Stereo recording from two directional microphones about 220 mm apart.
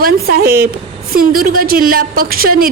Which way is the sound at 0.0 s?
45° right (ahead or behind).